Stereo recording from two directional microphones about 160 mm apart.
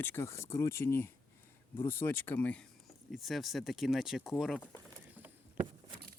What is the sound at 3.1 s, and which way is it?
Speech, centre (ahead or behind).